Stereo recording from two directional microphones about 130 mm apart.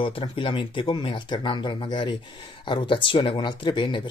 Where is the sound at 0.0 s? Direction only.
40° left (ahead or behind).